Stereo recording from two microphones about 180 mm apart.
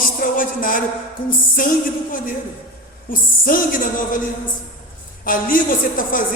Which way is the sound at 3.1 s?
50° left (ahead or behind).